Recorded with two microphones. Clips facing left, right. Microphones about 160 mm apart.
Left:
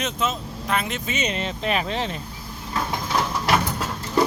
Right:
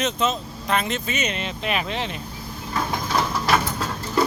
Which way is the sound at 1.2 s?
35° left (ahead or behind).